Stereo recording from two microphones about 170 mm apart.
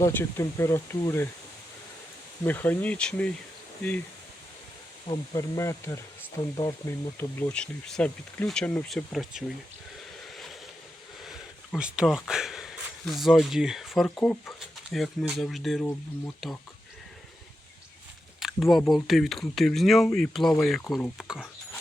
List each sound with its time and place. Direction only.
0.0 s speech: 15° left (ahead or behind)
2.4 s speech: 10° left (ahead or behind)
5.0 s speech: 20° left (ahead or behind); by 9.4 s centre (ahead or behind)
10.3 s vehicle: centre (ahead or behind)
11.2 s speech: centre (ahead or behind)
18.3 s a sound: centre (ahead or behind)
18.9 s speech: centre (ahead or behind)